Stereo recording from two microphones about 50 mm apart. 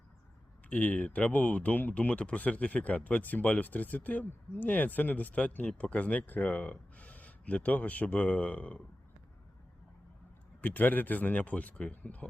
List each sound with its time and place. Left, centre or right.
0.7 s speech: left
10.6 s speech: left